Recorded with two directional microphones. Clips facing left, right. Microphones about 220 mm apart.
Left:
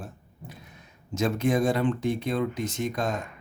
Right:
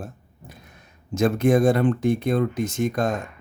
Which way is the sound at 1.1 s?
50° right (ahead or behind).